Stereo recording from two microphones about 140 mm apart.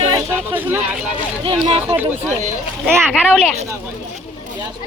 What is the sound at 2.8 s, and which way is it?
Speech, 5° left (ahead or behind).